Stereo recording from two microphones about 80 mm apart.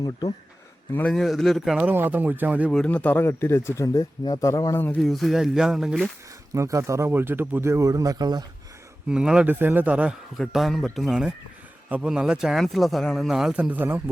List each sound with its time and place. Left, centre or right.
0.0 s speech: left
1.0 s speech: centre
1.8 s speech: right
2.7 s speech: centre
3.2 s a man's voice: left
4.9 s speech: centre
6.5 s speech: right
7.1 s speech: right
9.0 s speech: centre
9.5 s speech: right
10.3 s speech: centre
13.6 s speech: right